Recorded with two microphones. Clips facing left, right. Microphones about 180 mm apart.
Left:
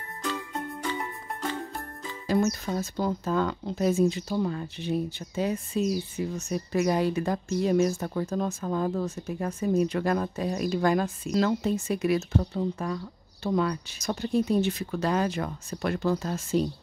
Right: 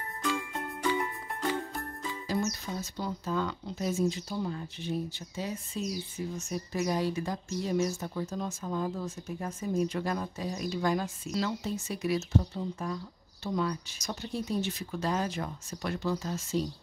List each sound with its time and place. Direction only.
2.2 s speech: 55° left (ahead or behind)